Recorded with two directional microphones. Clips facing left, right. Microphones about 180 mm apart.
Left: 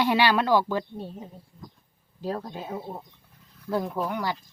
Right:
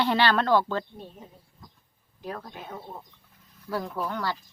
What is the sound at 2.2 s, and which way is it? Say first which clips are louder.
Speech: left 6 dB; 30° left (ahead or behind).